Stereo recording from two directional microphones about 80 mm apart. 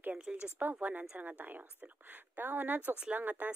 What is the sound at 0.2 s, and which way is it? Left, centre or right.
Speech, centre.